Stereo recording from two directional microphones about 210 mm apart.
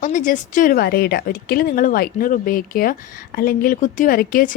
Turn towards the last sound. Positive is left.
turn(degrees=40)  # may be behind; listen again after turning